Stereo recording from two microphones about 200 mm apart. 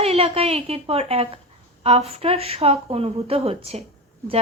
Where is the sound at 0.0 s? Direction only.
30° right (ahead or behind).